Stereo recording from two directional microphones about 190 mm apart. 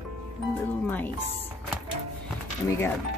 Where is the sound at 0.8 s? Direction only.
10° left (ahead or behind).